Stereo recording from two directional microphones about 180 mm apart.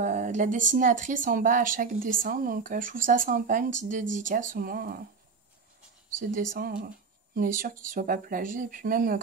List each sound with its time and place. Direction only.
0.0 s speech: 45° right (ahead or behind)
6.1 s speech: 50° right (ahead or behind)